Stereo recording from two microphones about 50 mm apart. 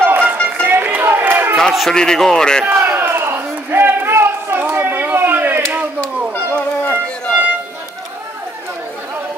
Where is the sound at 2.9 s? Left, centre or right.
Right.